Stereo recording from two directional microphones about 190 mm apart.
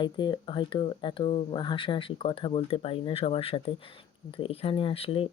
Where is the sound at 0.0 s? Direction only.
25° left (ahead or behind).